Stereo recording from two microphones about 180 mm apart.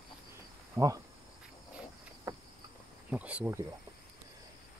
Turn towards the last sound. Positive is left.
turn(degrees=-10)  # may be behind; listen again after turning